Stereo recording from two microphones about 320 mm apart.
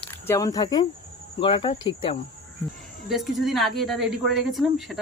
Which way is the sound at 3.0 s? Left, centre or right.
Centre.